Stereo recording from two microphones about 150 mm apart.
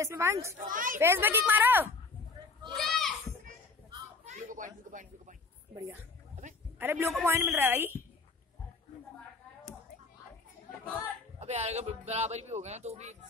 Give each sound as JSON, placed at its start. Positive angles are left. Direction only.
{"t": 0.0, "sound": "speech", "side_deg": -20}
{"t": 0.6, "sound": "speech", "side_deg": -65}
{"t": 0.9, "sound": "a woman's voice", "side_deg": -15}
{"t": 2.6, "sound": "a sound", "side_deg": 0}
{"t": 4.2, "sound": "a sound", "side_deg": -50}
{"t": 6.8, "sound": "a woman's voice", "side_deg": -15}
{"t": 11.3, "sound": "speech", "side_deg": -45}